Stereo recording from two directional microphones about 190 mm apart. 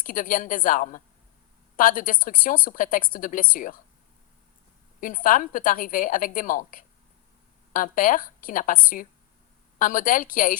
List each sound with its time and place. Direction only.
0.0 s a woman's voice: 45° left (ahead or behind)
4.9 s a woman's voice: 45° left (ahead or behind)